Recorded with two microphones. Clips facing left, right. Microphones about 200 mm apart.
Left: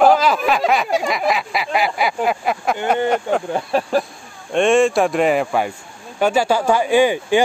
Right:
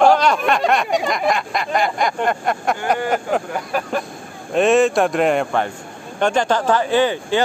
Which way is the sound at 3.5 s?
30° left (ahead or behind).